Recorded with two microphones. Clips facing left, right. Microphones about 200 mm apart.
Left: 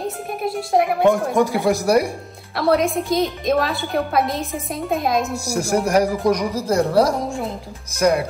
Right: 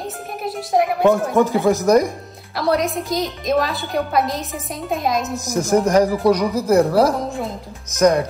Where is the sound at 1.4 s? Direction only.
15° left (ahead or behind).